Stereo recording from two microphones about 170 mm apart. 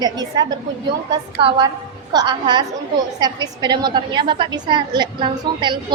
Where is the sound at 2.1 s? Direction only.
25° right (ahead or behind).